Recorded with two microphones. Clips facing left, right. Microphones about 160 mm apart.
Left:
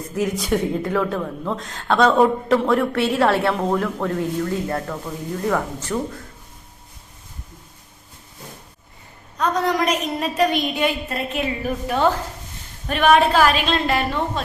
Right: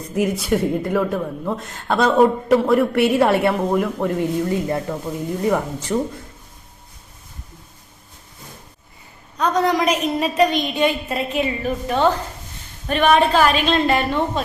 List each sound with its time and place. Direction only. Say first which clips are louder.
0.4 s a woman's voice: right 2 dB; 10° right (ahead or behind)
9.4 s a woman's voice: right 2 dB; centre (ahead or behind)